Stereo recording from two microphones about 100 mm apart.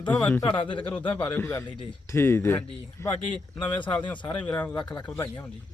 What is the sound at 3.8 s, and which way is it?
Speech, 15° left (ahead or behind).